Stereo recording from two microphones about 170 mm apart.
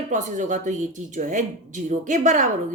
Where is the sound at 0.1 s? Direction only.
45° right (ahead or behind).